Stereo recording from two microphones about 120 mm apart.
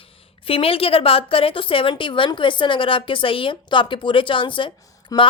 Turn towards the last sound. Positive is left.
turn(degrees=30)  # may be behind; listen again after turning